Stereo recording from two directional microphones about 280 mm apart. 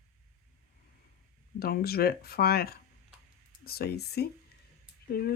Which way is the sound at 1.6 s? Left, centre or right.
Left.